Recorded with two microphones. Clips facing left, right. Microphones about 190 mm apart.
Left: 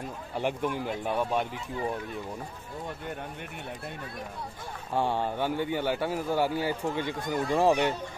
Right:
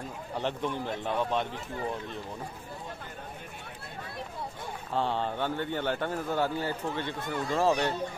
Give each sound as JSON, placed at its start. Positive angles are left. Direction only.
{"t": 0.4, "sound": "a man's voice", "side_deg": 10}
{"t": 4.9, "sound": "a man's voice", "side_deg": 10}